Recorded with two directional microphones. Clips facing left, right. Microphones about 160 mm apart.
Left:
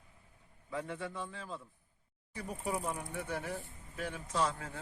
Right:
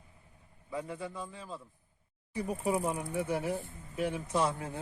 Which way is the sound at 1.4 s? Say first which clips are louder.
Right 1 dB; centre (ahead or behind).